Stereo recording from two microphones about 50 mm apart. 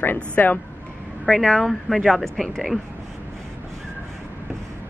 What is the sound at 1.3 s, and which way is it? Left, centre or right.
Speech, centre.